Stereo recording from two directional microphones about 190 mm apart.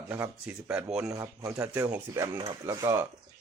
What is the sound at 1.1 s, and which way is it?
Speech, 15° right (ahead or behind).